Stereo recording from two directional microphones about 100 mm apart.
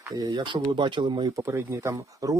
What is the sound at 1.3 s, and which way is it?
Speech, 30° right (ahead or behind).